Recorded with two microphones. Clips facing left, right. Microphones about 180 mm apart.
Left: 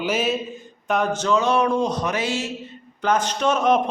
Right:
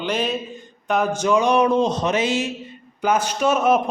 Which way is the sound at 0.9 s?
10° right (ahead or behind).